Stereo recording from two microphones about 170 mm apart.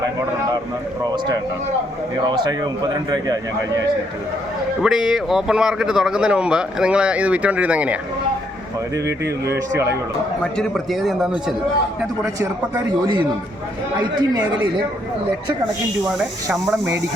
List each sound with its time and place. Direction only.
2.2 s speech: 25° right (ahead or behind)
4.8 s a man's voice: 5° right (ahead or behind)
10.4 s a man's voice: centre (ahead or behind)
12.2 s speech: 20° right (ahead or behind)
16.1 s a man's voice: centre (ahead or behind)